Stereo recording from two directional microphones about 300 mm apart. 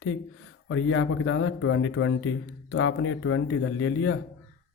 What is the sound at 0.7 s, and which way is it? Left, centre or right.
Speech, left.